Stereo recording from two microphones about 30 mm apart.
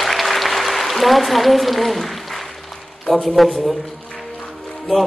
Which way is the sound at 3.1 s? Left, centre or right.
Centre.